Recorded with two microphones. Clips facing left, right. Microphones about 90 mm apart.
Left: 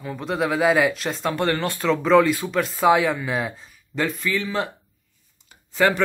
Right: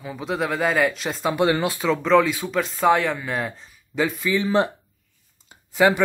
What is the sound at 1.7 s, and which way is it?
Speech, centre (ahead or behind).